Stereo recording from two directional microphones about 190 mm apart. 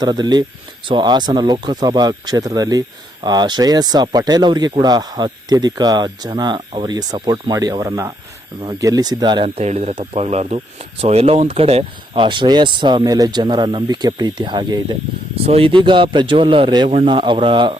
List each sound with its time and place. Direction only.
0.0 s speech: 20° right (ahead or behind)